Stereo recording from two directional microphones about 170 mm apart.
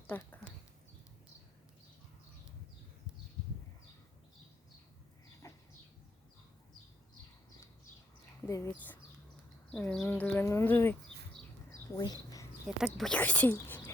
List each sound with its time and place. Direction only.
0.1 s a sound: 10° left (ahead or behind)
5.4 s bird: 15° left (ahead or behind)
8.4 s speech: 20° left (ahead or behind)
12.6 s speech: centre (ahead or behind)